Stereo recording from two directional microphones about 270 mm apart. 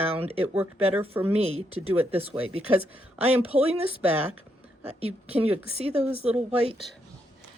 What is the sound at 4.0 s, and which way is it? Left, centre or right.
Speech, centre.